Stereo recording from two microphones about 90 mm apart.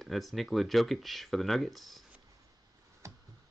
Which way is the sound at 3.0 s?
35° right (ahead or behind).